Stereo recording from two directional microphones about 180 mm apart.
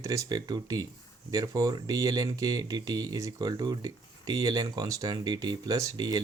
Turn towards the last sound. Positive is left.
turn(degrees=-20)  # may be behind; listen again after turning